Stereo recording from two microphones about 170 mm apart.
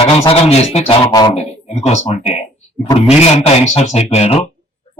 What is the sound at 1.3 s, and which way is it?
Speech, 40° left (ahead or behind).